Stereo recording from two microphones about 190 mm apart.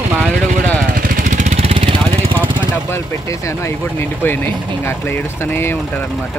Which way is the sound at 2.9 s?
15° left (ahead or behind).